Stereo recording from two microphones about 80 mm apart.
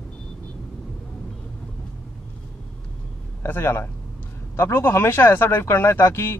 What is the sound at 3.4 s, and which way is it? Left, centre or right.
A man's voice, left.